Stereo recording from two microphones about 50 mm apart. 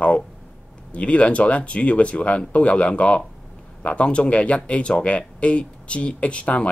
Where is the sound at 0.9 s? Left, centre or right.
Left.